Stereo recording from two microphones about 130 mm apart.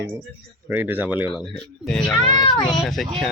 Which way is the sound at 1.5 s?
5° left (ahead or behind).